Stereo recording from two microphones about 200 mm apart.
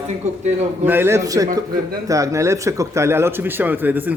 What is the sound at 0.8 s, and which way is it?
A man's voice, 10° right (ahead or behind).